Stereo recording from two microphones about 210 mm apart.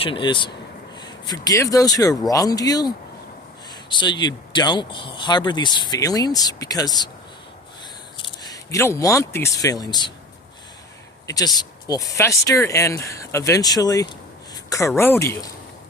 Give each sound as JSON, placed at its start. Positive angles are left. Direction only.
{"t": 0.0, "sound": "speech", "side_deg": 25}
{"t": 8.2, "sound": "speech", "side_deg": 20}
{"t": 11.3, "sound": "speech", "side_deg": 20}